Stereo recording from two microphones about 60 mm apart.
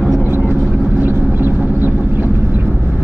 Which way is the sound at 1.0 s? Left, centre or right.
Right.